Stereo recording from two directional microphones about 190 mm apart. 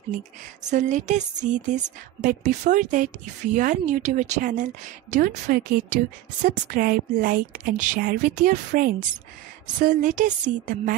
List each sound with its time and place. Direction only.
0.7 s a woman's voice: 40° right (ahead or behind)